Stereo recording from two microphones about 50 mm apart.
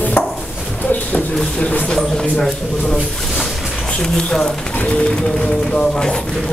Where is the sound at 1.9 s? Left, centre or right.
Centre.